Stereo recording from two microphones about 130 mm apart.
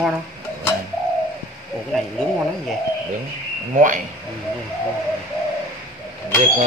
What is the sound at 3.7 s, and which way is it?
Speech, 80° right.